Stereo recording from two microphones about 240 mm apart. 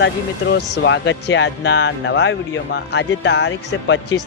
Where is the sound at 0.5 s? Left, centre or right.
Left.